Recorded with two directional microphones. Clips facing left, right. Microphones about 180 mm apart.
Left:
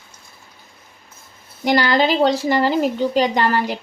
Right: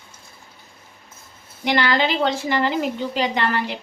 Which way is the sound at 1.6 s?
35° left (ahead or behind).